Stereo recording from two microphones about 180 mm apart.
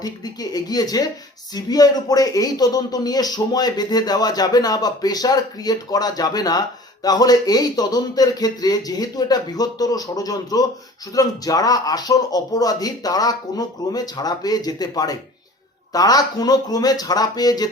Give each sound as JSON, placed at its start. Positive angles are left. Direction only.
{"t": 0.0, "sound": "speech", "side_deg": 20}